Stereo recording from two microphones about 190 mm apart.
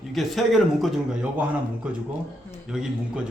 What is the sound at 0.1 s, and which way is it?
A man's voice, centre (ahead or behind).